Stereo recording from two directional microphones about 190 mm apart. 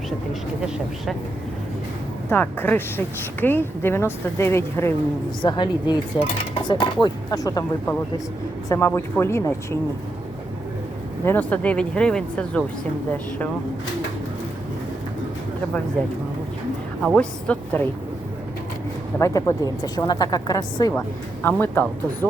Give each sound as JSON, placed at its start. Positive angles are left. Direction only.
{"t": 2.3, "sound": "speech", "side_deg": 10}
{"t": 5.4, "sound": "a woman's voice", "side_deg": 25}
{"t": 11.3, "sound": "speech", "side_deg": 10}
{"t": 17.0, "sound": "a woman's voice", "side_deg": 5}
{"t": 19.2, "sound": "a woman's voice", "side_deg": 15}
{"t": 21.4, "sound": "speech", "side_deg": 10}